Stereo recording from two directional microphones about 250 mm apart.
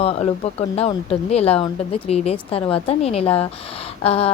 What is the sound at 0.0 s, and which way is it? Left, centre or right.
A woman's voice, left.